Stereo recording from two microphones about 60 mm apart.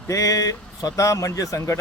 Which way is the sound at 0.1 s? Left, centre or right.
Left.